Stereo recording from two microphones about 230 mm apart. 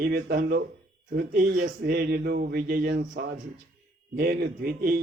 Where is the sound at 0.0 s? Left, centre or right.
Right.